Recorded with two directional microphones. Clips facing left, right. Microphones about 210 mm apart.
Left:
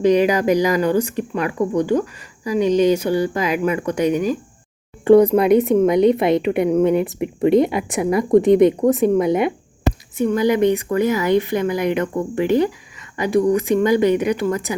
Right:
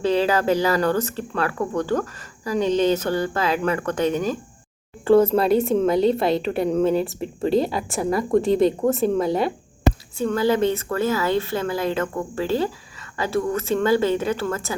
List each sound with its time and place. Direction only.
0.0 s speech: 15° left (ahead or behind)